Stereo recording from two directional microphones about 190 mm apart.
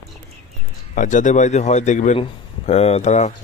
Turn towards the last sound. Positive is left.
turn(degrees=35)  # may be behind; listen again after turning